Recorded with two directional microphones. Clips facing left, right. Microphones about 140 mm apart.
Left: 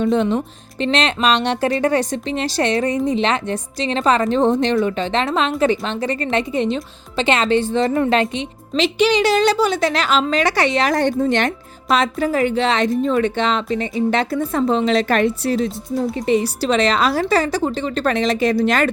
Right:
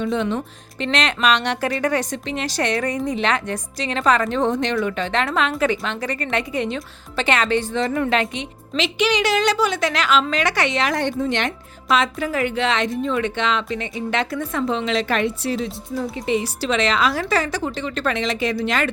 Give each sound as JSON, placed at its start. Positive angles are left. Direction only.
{"t": 0.0, "sound": "speech", "side_deg": 40}